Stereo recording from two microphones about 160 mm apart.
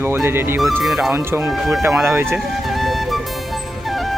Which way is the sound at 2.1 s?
15° right (ahead or behind).